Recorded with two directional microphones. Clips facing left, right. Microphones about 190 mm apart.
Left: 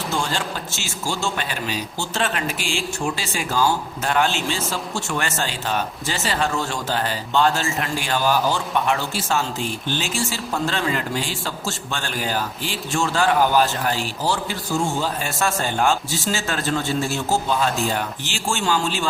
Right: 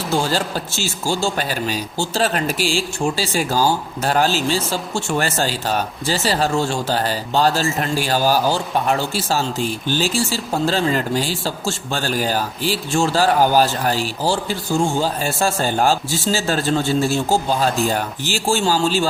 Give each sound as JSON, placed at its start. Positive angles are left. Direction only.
{"t": 0.1, "sound": "a man's voice", "side_deg": -35}